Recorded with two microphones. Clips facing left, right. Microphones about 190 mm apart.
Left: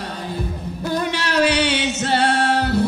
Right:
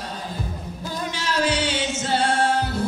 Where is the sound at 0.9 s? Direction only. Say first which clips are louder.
Left 6 dB; 65° left (ahead or behind).